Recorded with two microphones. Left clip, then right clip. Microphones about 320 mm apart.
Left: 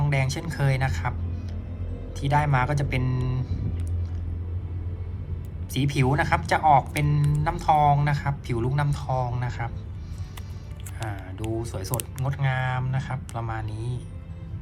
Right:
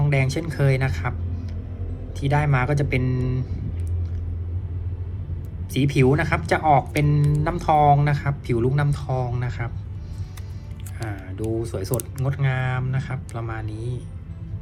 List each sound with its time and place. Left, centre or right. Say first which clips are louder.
0.0 s speech: right 4 dB; centre
2.2 s speech: even; centre
5.7 s speech: right 5 dB; centre
11.0 s a sound: right 3 dB; centre
11.6 s speech: right 5 dB; centre